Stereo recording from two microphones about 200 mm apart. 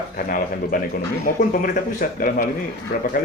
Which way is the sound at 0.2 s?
45° left (ahead or behind).